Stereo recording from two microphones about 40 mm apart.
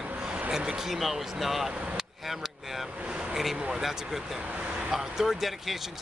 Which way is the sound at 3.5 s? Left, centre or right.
Right.